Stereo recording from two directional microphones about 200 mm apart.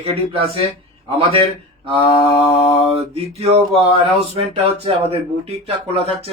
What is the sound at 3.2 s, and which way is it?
Speech, 30° right (ahead or behind).